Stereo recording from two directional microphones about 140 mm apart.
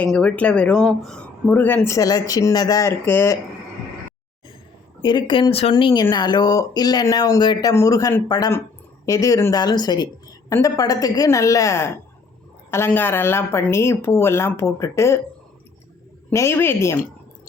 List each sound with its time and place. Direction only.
0.0 s speech: 10° left (ahead or behind)
5.0 s speech: 35° left (ahead or behind)
5.7 s a woman's voice: 30° left (ahead or behind)
16.3 s a woman's voice: 20° left (ahead or behind)